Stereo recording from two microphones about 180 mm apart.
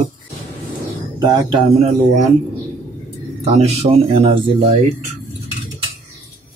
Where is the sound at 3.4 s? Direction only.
35° right (ahead or behind).